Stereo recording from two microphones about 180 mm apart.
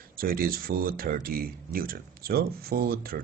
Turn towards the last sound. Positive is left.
turn(degrees=-60)  # may be behind; listen again after turning